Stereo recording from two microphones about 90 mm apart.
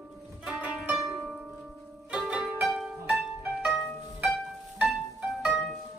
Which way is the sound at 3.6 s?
10° right (ahead or behind).